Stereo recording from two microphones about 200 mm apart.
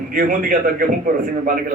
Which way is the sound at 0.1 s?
45° right (ahead or behind).